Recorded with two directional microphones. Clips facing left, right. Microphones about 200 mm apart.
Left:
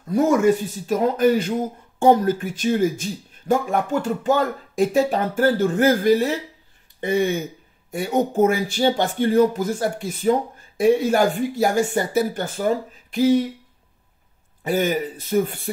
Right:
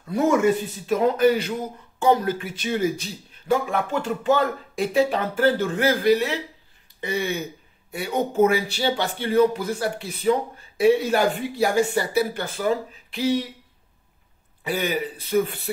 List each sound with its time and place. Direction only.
0.8 s speech: 45° left (ahead or behind)
14.6 s speech: 45° left (ahead or behind)